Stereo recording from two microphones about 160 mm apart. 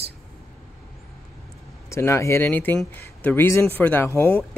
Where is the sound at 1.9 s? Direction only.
20° left (ahead or behind).